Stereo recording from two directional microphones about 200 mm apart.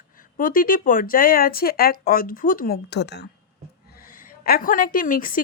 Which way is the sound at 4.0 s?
45° left (ahead or behind).